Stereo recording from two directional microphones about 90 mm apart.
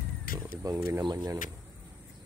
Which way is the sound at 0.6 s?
35° right (ahead or behind).